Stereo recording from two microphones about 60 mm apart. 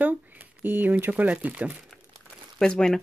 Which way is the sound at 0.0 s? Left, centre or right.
Right.